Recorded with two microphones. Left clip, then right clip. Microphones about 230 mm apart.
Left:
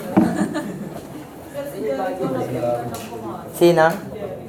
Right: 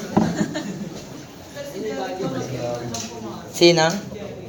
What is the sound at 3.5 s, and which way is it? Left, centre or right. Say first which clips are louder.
Speech: left 1 dB; right.